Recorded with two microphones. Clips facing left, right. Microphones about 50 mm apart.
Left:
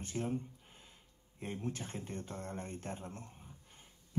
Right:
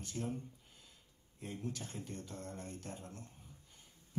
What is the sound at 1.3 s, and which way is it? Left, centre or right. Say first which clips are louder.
Speech: left 3 dB; left.